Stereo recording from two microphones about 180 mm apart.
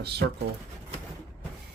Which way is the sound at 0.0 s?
65° right (ahead or behind).